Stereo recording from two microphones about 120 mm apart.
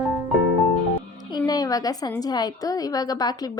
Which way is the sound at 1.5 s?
30° left (ahead or behind).